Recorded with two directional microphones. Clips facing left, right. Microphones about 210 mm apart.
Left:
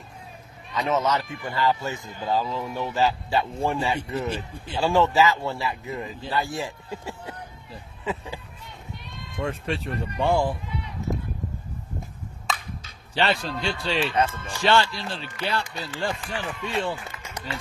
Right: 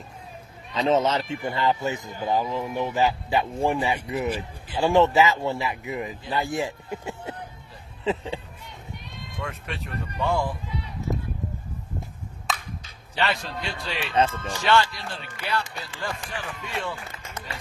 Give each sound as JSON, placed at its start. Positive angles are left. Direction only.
{"t": 0.7, "sound": "speech", "side_deg": -30}
{"t": 8.0, "sound": "a sound", "side_deg": -25}
{"t": 9.4, "sound": "speech", "side_deg": 30}
{"t": 13.1, "sound": "speech", "side_deg": 30}
{"t": 14.1, "sound": "speech", "side_deg": -30}
{"t": 14.6, "sound": "speech", "side_deg": 30}